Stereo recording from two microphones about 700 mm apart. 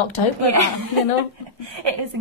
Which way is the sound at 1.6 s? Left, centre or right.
Right.